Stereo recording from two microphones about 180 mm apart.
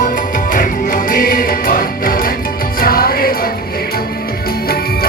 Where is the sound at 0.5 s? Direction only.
50° left (ahead or behind).